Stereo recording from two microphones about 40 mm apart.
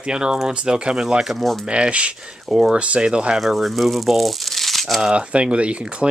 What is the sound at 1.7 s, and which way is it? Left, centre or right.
Speech, right.